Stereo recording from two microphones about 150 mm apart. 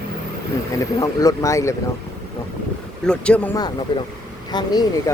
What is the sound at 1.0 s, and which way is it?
Speech, 20° left (ahead or behind).